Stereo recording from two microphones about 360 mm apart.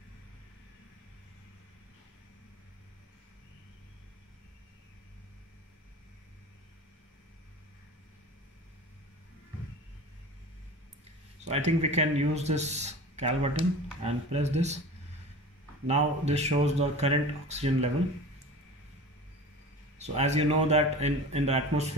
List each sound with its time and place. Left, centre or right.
11.4 s speech: centre
15.9 s speech: centre
20.0 s speech: centre